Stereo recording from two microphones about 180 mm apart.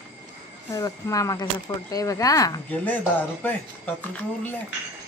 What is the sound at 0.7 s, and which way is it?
Speech, 20° left (ahead or behind).